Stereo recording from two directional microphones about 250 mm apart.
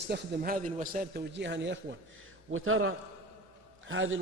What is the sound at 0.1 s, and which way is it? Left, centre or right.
A man's voice, right.